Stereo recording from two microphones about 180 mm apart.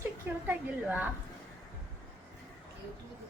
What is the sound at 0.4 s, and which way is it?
Speech, 10° right (ahead or behind).